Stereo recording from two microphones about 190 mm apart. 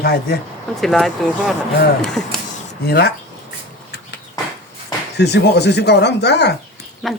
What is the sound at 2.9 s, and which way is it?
Speech, 60° left (ahead or behind).